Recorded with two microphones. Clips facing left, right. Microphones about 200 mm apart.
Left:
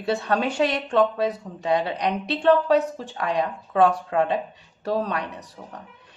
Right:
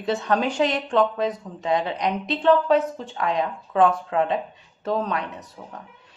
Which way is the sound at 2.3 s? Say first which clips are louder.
Even; 40° left (ahead or behind).